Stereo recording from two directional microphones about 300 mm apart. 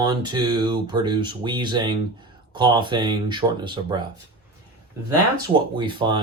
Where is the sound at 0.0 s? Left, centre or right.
Centre.